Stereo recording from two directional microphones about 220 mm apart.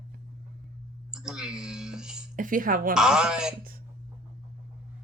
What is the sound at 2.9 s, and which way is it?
Speech, 5° right (ahead or behind).